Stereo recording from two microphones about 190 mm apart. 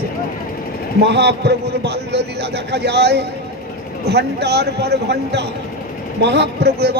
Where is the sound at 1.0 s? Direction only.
65° right (ahead or behind).